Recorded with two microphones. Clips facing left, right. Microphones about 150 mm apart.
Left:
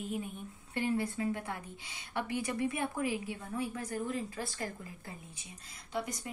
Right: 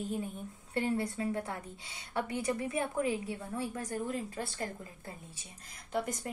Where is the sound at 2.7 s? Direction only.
25° right (ahead or behind).